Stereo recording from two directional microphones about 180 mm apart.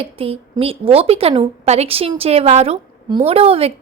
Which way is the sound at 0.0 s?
30° right (ahead or behind).